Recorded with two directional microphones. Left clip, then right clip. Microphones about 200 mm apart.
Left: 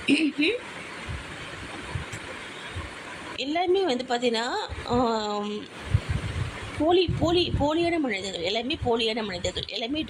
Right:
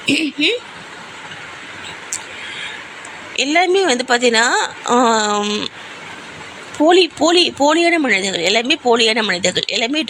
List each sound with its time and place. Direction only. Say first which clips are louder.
0.0 s speech: right 7 dB; centre (ahead or behind)
3.3 s speech: right 11 dB; 15° right (ahead or behind)
6.8 s speech: right 11 dB; 15° right (ahead or behind)